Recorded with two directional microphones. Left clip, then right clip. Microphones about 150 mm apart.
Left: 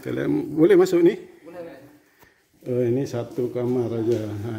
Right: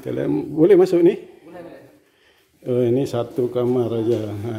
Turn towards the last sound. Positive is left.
turn(degrees=-10)  # may be behind; listen again after turning